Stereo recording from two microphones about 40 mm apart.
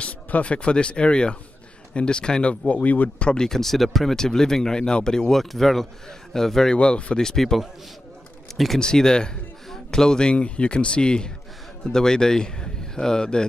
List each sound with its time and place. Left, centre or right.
0.0 s speech: left
2.7 s speech: left
3.4 s a man's voice: centre
4.2 s a man's voice: centre
5.4 s a man's voice: centre
6.8 s speech: left
7.2 s a man's voice: centre
8.7 s a man's voice: centre